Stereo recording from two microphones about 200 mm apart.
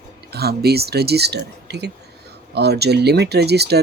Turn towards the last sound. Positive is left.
turn(degrees=-55)  # may be behind; listen again after turning